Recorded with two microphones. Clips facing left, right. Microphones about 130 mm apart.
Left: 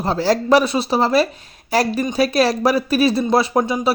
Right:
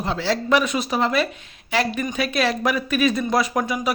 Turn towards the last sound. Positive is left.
turn(degrees=30)  # may be behind; listen again after turning